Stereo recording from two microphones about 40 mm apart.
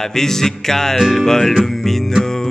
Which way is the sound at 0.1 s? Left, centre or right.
Centre.